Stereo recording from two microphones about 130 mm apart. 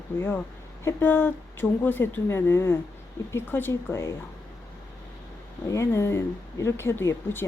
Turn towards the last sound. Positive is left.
turn(degrees=15)  # may be behind; listen again after turning